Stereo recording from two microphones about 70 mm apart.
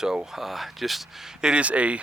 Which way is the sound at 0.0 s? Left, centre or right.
Centre.